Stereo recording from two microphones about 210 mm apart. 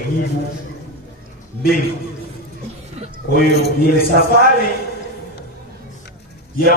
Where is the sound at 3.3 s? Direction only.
45° left (ahead or behind).